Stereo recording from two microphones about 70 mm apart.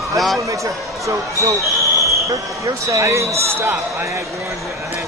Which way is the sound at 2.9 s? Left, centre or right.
Right.